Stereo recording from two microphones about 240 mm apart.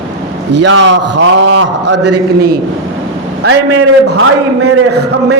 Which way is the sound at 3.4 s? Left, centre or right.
Right.